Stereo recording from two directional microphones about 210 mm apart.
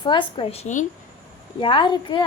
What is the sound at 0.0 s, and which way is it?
Speech, 20° left (ahead or behind).